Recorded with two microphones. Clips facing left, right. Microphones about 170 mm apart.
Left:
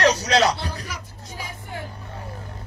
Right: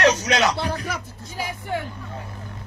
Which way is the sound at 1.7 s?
65° right (ahead or behind).